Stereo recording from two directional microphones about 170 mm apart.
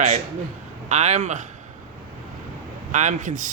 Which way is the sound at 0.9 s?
40° right (ahead or behind).